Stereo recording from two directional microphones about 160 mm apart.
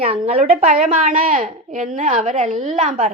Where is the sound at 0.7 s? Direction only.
55° right (ahead or behind).